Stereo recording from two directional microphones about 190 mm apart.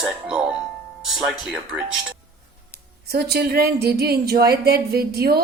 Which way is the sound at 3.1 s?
55° right (ahead or behind).